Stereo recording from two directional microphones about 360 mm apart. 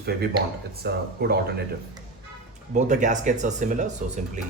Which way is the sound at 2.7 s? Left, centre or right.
Centre.